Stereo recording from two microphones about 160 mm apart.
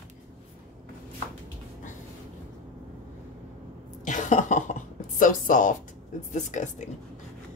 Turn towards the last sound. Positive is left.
turn(degrees=50)  # may be behind; listen again after turning